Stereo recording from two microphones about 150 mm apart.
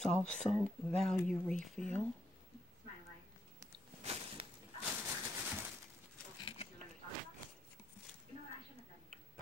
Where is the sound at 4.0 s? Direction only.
45° right (ahead or behind).